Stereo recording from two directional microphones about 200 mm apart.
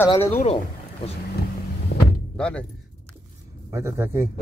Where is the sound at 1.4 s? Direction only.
55° left (ahead or behind).